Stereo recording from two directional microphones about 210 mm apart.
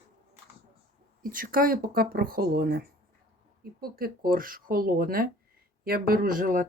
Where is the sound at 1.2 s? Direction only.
40° right (ahead or behind).